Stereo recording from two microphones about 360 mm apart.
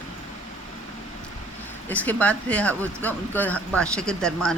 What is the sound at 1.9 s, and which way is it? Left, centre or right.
Speech, centre.